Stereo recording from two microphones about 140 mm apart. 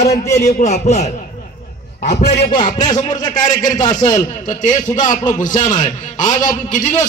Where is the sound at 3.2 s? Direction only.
30° left (ahead or behind).